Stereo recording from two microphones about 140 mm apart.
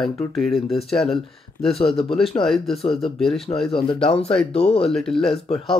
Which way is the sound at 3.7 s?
40° left (ahead or behind).